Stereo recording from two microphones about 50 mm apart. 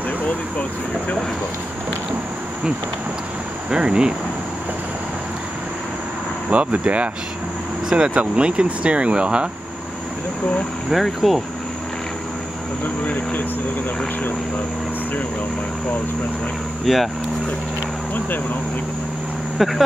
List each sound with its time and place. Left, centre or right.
3.7 s speech: centre
6.5 s speech: right
8.1 s speech: right
10.9 s speech: centre
13.0 s speech: left
16.8 s speech: centre
19.6 s speech: centre